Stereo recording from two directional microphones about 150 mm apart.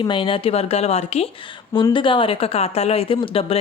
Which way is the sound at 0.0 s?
35° left (ahead or behind).